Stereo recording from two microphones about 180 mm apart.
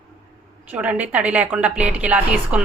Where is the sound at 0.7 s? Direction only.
10° right (ahead or behind).